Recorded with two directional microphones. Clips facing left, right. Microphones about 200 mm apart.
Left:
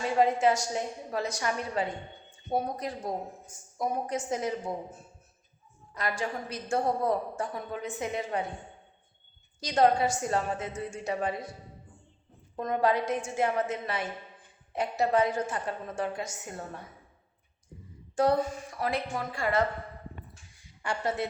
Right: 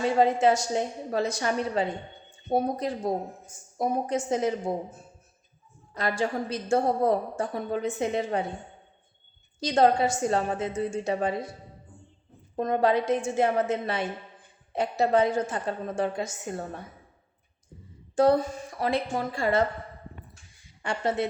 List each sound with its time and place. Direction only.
0.0 s a woman's voice: 25° right (ahead or behind)
5.9 s a woman's voice: 30° right (ahead or behind)
9.6 s a woman's voice: 30° right (ahead or behind)
12.5 s a woman's voice: 30° right (ahead or behind)
18.1 s a woman's voice: 30° right (ahead or behind)
20.8 s a woman's voice: 25° right (ahead or behind)